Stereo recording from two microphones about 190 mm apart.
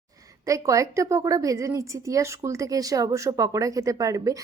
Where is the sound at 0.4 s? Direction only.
15° right (ahead or behind).